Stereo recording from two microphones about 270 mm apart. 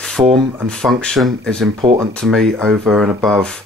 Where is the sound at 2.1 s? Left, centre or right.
Centre.